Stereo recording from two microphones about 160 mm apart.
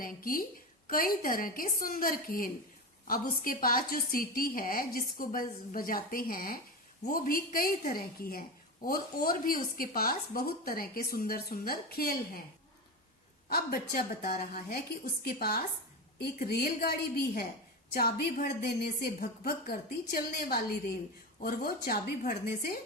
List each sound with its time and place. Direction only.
0.0 s a woman's voice: 60° left (ahead or behind)
13.5 s a woman's voice: 70° left (ahead or behind)